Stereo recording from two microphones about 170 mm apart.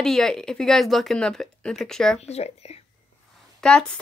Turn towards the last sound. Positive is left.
turn(degrees=5)  # may be behind; listen again after turning